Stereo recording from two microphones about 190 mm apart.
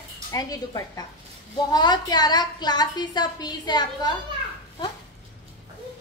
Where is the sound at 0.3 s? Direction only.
20° left (ahead or behind).